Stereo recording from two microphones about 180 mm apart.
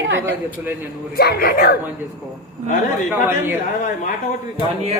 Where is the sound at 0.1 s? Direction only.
85° right.